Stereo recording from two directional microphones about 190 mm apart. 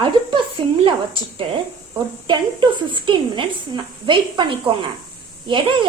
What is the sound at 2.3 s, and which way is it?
A woman's voice, 25° right (ahead or behind).